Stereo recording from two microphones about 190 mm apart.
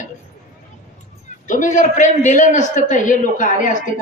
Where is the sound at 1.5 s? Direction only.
40° left (ahead or behind).